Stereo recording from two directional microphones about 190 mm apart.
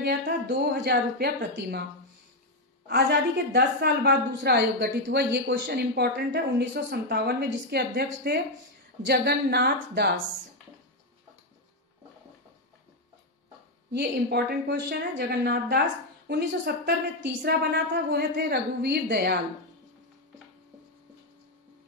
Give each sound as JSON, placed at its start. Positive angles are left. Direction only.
{"t": 0.0, "sound": "a woman's voice", "side_deg": -60}
{"t": 2.9, "sound": "a woman's voice", "side_deg": -60}
{"t": 13.9, "sound": "a woman's voice", "side_deg": -60}